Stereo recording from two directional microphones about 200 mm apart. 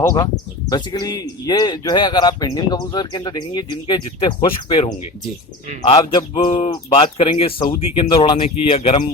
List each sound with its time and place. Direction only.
0.0 s speech: 15° left (ahead or behind)